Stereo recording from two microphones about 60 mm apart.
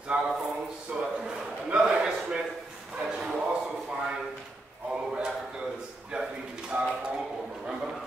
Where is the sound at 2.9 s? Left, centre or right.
Centre.